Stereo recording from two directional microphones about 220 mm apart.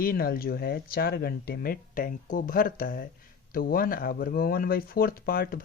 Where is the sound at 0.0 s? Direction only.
40° left (ahead or behind).